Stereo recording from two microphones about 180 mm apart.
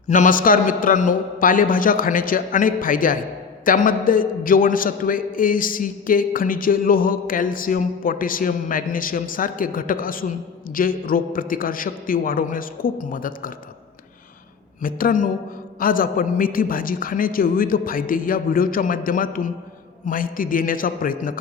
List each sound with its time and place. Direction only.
0.1 s a man's voice: 45° left (ahead or behind)
14.8 s a man's voice: 50° left (ahead or behind)